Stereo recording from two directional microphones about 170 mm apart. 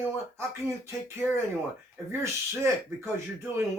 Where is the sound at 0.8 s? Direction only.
15° right (ahead or behind).